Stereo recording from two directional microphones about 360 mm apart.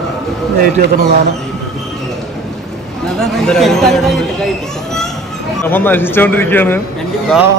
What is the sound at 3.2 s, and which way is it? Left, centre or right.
Speech, centre.